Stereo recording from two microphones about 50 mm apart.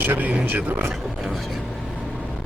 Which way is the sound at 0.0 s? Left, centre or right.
Right.